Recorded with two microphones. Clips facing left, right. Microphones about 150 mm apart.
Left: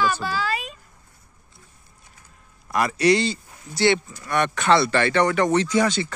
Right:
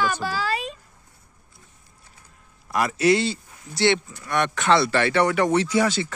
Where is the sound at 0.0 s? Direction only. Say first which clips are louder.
Left 1 dB; 45° right (ahead or behind).